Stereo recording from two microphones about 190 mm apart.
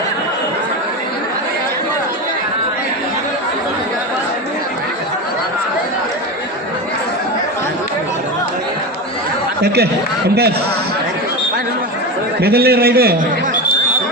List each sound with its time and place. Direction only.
9.6 s speech: 60° right (ahead or behind)
12.4 s speech: 55° right (ahead or behind)